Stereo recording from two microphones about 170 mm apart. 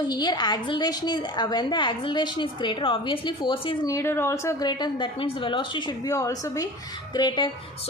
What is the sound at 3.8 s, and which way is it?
A woman's voice, 15° left (ahead or behind).